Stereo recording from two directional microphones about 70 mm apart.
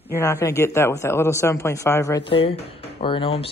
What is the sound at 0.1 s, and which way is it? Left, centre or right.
A man's voice, left.